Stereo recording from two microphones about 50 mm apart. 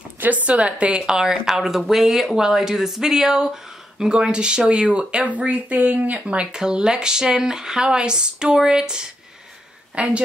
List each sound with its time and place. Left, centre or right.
0.2 s a woman's voice: right
1.0 s a woman's voice: centre
9.9 s a woman's voice: right